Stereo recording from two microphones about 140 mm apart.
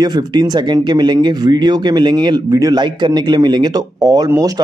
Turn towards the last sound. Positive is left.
turn(degrees=-25)  # may be behind; listen again after turning